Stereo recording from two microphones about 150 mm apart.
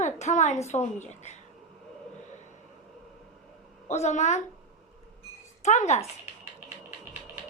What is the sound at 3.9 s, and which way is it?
Speech, 50° left (ahead or behind).